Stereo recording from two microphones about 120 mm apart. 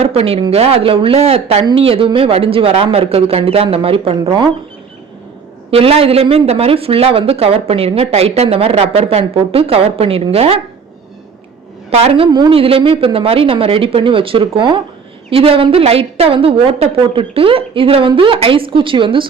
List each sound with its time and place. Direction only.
0.0 s a sound: 55° right (ahead or behind)
0.5 s speech: 55° right (ahead or behind)
5.7 s speech: 55° right (ahead or behind)
11.9 s speech: 55° right (ahead or behind)